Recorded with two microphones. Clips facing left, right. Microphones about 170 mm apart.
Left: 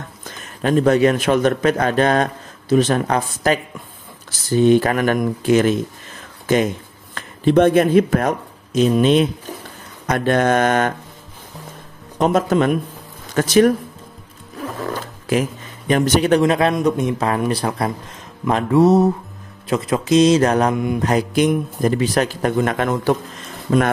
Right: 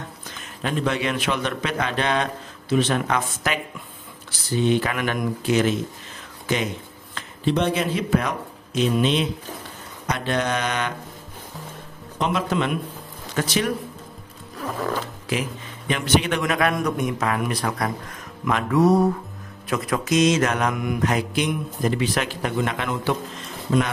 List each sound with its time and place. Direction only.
0.6 s a man's voice: 45° left (ahead or behind)
2.7 s mantra: 40° left (ahead or behind)
4.3 s a man's voice: 45° left (ahead or behind)
12.2 s a man's voice: 45° left (ahead or behind)
15.3 s a man's voice: 45° left (ahead or behind)
15.9 s mantra: 40° left (ahead or behind)
18.4 s music: 30° left (ahead or behind)
19.7 s mantra: 25° left (ahead or behind); by 23.1 s 45° left (ahead or behind)
23.7 s speech: 60° left (ahead or behind)